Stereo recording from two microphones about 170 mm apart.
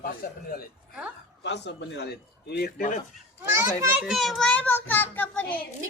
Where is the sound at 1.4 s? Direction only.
85° left; by 3.0 s 55° left (ahead or behind).